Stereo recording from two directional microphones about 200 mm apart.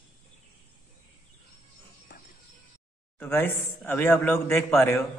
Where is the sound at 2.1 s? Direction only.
50° left (ahead or behind).